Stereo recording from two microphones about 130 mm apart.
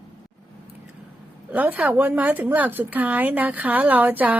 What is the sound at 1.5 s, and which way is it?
A woman's voice, 15° right (ahead or behind).